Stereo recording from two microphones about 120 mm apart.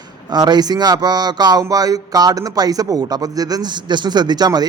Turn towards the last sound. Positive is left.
turn(degrees=-35)  # may be behind; listen again after turning